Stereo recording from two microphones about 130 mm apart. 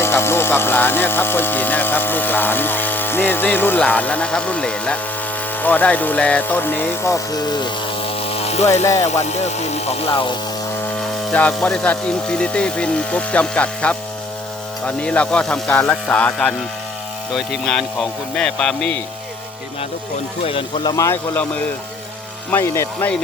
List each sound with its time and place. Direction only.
0.0 s speech: 20° left (ahead or behind); by 8.8 s 55° left (ahead or behind)
8.8 s speech: 25° left (ahead or behind)
9.0 s speech: 60° left (ahead or behind); by 10.3 s 45° left (ahead or behind)
10.9 s speech: 10° left (ahead or behind)
20.4 s speech: 45° left (ahead or behind)
20.9 s speech: 25° left (ahead or behind)
22.4 s speech: 15° left (ahead or behind)